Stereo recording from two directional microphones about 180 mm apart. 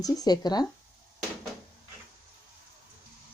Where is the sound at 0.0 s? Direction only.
20° left (ahead or behind).